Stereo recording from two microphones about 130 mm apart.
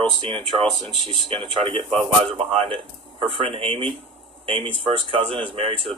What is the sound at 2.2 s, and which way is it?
Speech, 50° right (ahead or behind).